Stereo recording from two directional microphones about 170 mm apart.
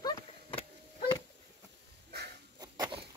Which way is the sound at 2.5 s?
25° right (ahead or behind).